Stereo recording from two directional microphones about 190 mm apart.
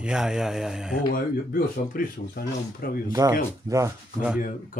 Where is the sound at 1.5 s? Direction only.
50° left (ahead or behind).